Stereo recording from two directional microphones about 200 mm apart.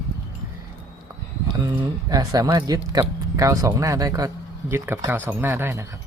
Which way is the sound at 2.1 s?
20° right (ahead or behind).